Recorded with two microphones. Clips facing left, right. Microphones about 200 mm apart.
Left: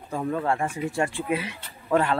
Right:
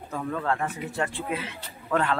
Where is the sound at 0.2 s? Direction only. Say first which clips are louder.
Left 2 dB; 20° left (ahead or behind).